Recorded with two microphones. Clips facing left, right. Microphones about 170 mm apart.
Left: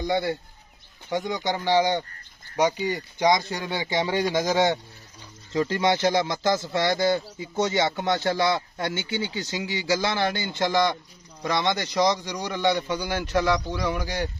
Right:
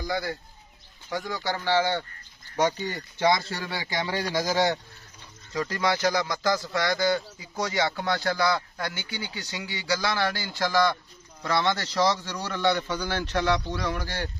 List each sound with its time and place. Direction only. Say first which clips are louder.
0.0 s a man's voice: left 5 dB; 25° left (ahead or behind)